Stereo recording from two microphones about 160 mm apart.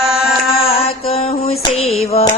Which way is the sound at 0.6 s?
35° left (ahead or behind).